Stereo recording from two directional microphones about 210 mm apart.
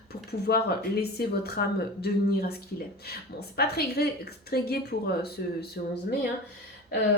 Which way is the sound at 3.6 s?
50° left (ahead or behind).